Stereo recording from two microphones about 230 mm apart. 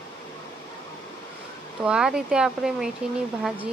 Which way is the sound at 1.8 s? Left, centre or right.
Centre.